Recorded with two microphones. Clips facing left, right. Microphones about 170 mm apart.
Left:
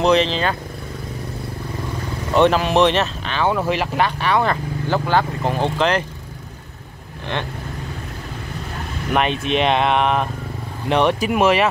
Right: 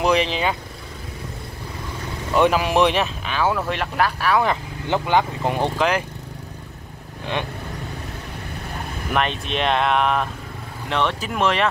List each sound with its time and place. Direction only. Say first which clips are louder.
0.0 s speech: left 3 dB; 10° right (ahead or behind)
2.3 s speech: left 2 dB; 10° right (ahead or behind)
4.8 s speech: even; 15° right (ahead or behind)
9.1 s speech: left 4 dB; centre (ahead or behind)
10.9 s speech: left 6 dB; 15° left (ahead or behind)